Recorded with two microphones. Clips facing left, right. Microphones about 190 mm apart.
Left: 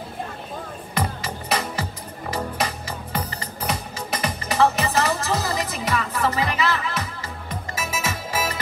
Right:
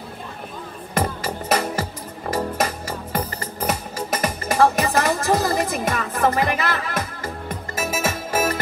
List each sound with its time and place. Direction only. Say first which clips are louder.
0.9 s music: right 4 dB; 45° right (ahead or behind)
4.1 s music: right 3 dB; 45° right (ahead or behind)